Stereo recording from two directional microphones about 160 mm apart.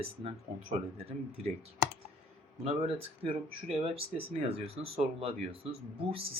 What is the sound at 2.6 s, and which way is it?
Speech, 35° right (ahead or behind).